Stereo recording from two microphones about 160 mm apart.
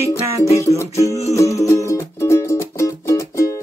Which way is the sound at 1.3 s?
20° left (ahead or behind).